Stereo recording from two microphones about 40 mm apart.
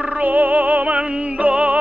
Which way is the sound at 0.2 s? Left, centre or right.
Right.